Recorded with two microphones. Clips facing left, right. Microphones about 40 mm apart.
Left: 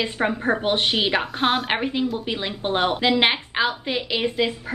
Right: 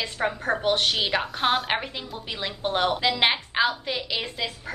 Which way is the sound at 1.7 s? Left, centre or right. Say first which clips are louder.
Left 6 dB; centre.